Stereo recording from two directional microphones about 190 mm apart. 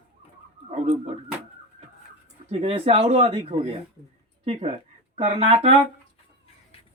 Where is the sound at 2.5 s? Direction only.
30° right (ahead or behind).